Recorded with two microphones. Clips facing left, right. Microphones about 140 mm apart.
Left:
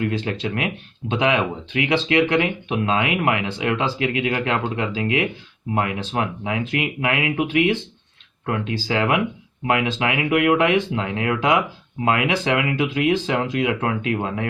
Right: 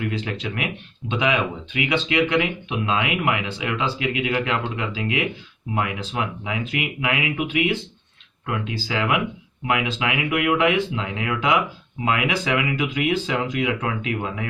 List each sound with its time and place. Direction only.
0.0 s speech: 30° left (ahead or behind)
8.9 s speech: 30° left (ahead or behind)